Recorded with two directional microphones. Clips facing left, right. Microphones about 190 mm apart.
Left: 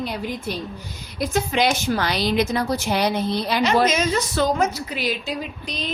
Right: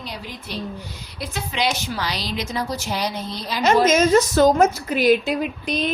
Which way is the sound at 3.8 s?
45° right (ahead or behind).